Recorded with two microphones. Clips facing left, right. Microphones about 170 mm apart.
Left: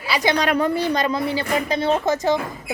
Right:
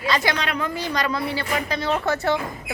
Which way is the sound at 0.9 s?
25° left (ahead or behind).